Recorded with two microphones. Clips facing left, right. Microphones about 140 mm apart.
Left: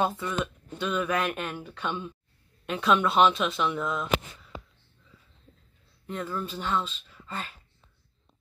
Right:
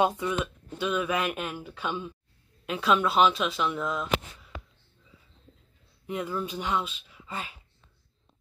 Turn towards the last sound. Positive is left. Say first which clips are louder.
# even
turn(degrees=-10)  # may be behind; listen again after turning